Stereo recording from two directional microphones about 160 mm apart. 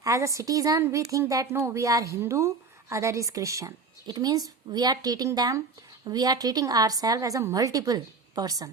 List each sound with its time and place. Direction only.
0.0 s a woman's voice: 20° right (ahead or behind)